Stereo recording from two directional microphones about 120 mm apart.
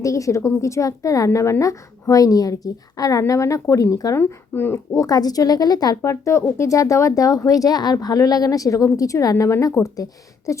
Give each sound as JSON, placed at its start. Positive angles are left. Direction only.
{"t": 0.0, "sound": "speech", "side_deg": 25}
{"t": 5.0, "sound": "speech", "side_deg": 30}